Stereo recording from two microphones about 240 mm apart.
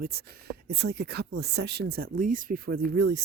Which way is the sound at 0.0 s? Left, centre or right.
Right.